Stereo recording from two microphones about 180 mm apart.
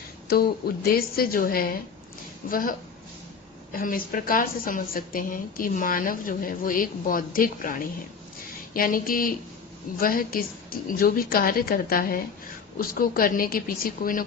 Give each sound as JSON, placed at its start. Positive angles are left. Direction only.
{"t": 0.3, "sound": "a woman's voice", "side_deg": 55}